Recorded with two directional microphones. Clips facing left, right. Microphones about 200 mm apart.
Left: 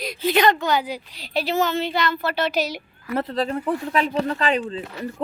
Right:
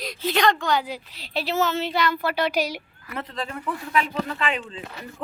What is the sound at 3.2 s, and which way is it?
Speech, 40° left (ahead or behind).